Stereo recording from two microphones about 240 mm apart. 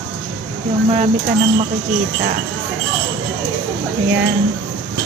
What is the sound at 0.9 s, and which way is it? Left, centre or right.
Speech, right.